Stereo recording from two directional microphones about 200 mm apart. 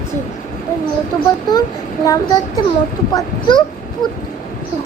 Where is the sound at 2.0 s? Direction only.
15° left (ahead or behind).